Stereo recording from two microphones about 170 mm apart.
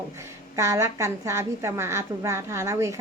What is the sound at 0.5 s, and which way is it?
Speech, 15° right (ahead or behind).